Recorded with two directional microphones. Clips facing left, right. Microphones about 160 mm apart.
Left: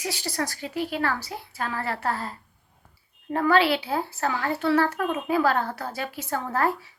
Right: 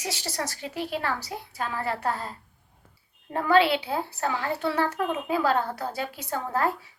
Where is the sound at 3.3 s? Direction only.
20° right (ahead or behind).